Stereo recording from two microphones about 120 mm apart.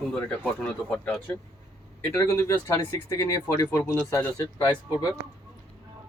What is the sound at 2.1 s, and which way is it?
Speech, 25° left (ahead or behind).